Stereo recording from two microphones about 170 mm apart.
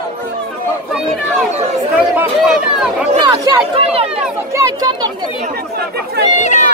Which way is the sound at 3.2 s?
25° right (ahead or behind).